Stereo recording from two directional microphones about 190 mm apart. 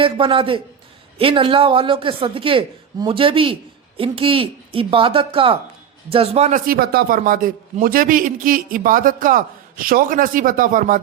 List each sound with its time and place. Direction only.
0.0 s a woman's voice: 25° right (ahead or behind)
6.7 s a man's voice: 50° right (ahead or behind)